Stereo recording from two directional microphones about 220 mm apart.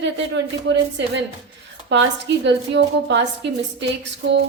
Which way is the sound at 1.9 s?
55° right (ahead or behind).